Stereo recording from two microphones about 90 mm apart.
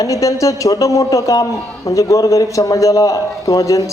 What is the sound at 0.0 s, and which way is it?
A man's voice, 40° left (ahead or behind).